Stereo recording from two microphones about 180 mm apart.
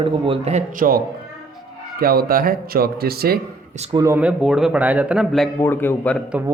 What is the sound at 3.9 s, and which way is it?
Speech, 15° right (ahead or behind).